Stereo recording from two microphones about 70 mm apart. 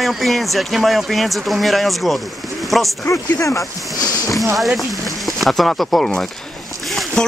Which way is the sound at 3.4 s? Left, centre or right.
Left.